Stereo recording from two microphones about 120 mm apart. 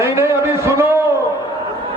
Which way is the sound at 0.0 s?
20° right (ahead or behind).